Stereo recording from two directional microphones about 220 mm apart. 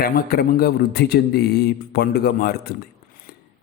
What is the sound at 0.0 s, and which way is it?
A man's voice, 40° left (ahead or behind).